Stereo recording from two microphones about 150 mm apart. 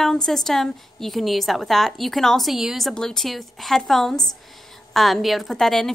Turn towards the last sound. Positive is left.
turn(degrees=0)  # may be behind; listen again after turning